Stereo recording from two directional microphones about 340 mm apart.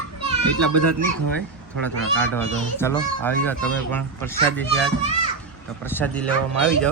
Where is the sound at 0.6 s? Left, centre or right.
Right.